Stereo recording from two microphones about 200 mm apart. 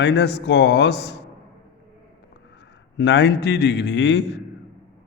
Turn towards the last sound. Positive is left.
turn(degrees=60)  # may be behind; listen again after turning